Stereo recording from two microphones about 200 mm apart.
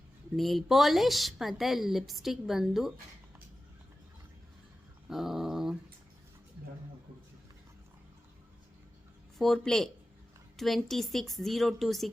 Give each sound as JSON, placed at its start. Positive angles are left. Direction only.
{"t": 0.3, "sound": "a woman's voice", "side_deg": 0}
{"t": 5.0, "sound": "dog", "side_deg": 0}
{"t": 9.4, "sound": "a woman's voice", "side_deg": 0}